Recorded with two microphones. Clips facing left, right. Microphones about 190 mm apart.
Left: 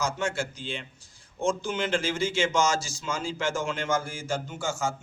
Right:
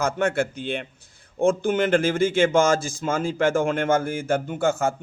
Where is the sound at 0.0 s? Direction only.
60° right (ahead or behind).